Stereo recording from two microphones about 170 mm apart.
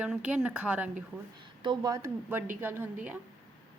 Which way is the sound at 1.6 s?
25° right (ahead or behind).